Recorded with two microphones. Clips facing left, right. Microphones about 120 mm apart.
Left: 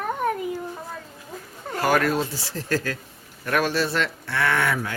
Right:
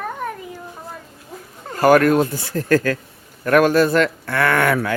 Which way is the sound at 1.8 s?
50° right (ahead or behind).